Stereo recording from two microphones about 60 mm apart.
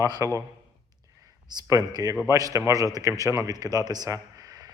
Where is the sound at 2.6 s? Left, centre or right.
Right.